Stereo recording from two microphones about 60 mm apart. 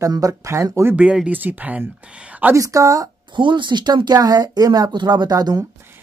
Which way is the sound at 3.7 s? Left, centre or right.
Right.